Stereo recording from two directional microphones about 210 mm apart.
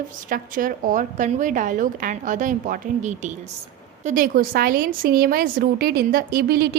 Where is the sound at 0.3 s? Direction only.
40° right (ahead or behind).